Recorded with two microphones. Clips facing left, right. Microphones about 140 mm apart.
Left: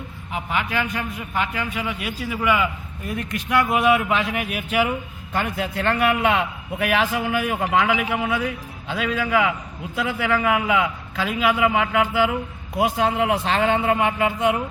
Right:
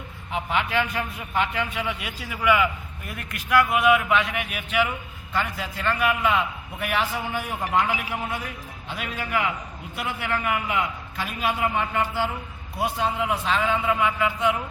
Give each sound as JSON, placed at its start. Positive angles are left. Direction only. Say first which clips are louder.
{"t": 0.5, "sound": "a man's voice", "louder": "even", "side_deg": -25}
{"t": 2.0, "sound": "a man's voice", "louder": "left 1 dB", "side_deg": 20}